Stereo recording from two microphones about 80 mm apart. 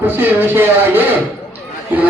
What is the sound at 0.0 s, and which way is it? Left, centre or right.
A man's voice, right.